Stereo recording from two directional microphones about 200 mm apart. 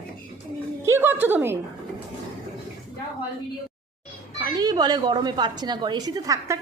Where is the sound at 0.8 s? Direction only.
10° right (ahead or behind).